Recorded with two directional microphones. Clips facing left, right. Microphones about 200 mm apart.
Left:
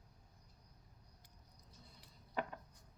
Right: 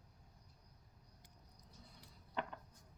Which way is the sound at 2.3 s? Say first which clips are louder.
Left 2 dB; 5° left (ahead or behind).